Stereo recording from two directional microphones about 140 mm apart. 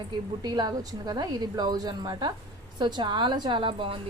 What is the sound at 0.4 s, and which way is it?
A woman's voice, 30° right (ahead or behind).